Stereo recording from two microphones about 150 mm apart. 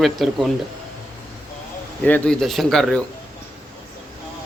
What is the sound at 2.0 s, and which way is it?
Speech, 5° left (ahead or behind).